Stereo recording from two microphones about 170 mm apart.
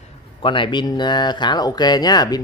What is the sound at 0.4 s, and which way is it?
Speech, 30° left (ahead or behind).